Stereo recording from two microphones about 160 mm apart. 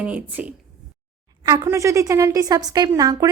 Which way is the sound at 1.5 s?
20° right (ahead or behind).